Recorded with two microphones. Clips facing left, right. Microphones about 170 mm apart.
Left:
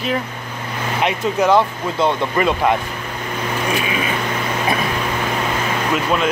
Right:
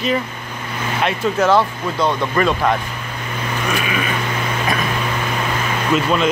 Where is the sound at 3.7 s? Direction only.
25° left (ahead or behind).